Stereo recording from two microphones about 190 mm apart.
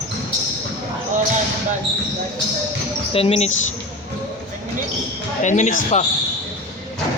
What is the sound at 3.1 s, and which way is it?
Speech, 30° left (ahead or behind).